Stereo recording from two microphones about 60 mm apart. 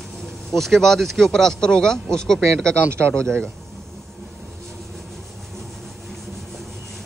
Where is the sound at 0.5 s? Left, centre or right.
Centre.